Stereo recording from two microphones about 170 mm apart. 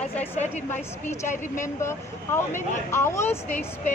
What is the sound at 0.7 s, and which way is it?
Speech, 15° left (ahead or behind).